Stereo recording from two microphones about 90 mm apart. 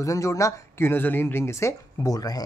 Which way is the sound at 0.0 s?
35° left (ahead or behind).